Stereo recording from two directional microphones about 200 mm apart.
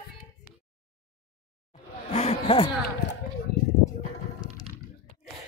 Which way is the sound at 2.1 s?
30° left (ahead or behind).